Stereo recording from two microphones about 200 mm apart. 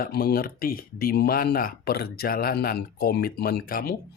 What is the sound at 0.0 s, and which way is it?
Speech, 50° left (ahead or behind).